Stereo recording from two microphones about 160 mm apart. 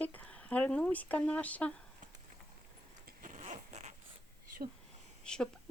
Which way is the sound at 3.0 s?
55° right (ahead or behind).